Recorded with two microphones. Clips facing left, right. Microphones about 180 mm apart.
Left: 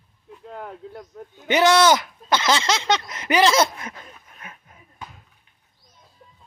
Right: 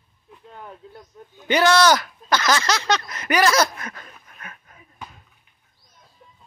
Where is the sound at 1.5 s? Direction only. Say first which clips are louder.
Left 1 dB; 20° left (ahead or behind).